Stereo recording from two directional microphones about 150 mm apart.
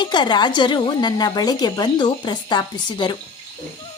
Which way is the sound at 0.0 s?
30° left (ahead or behind).